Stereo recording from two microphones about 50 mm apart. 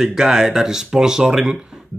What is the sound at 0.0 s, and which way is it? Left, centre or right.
Speech, centre.